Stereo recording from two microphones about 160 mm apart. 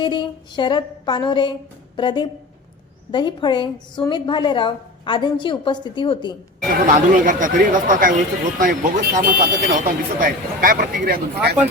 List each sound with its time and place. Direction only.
0.0 s a woman's voice: 30° left (ahead or behind)
6.8 s speech: 55° right (ahead or behind); by 11.5 s 70° right (ahead or behind)